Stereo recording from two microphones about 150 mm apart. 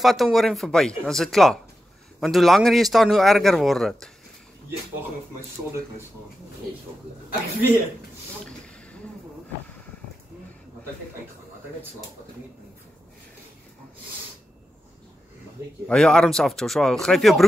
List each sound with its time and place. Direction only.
0.0 s a man's voice: centre (ahead or behind)
8.5 s a sound: 5° left (ahead or behind)
15.9 s a man's voice: 5° left (ahead or behind)